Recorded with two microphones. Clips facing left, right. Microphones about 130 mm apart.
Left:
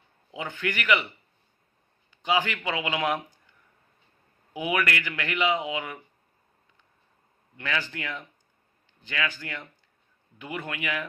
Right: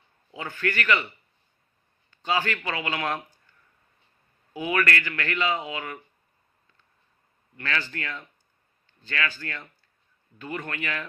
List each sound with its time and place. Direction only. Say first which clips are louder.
0.3 s speech: right 1 dB; 15° left (ahead or behind)
4.5 s speech: right 1 dB; 15° left (ahead or behind)
7.5 s speech: even; 15° left (ahead or behind)